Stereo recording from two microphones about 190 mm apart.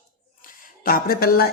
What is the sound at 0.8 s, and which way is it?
Speech, 50° left (ahead or behind).